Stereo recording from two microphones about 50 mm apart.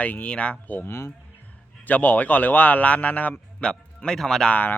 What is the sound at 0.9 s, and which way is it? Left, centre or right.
Mantra, left.